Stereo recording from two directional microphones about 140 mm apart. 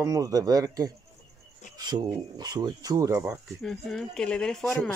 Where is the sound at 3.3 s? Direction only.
Centre (ahead or behind).